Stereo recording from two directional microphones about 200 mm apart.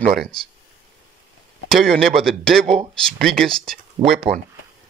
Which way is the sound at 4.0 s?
20° right (ahead or behind).